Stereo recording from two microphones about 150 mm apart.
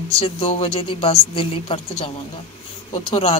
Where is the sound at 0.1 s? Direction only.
40° left (ahead or behind).